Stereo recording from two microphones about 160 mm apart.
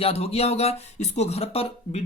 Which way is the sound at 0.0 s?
40° left (ahead or behind).